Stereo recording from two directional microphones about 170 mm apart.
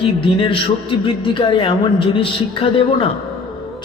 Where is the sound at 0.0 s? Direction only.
30° left (ahead or behind).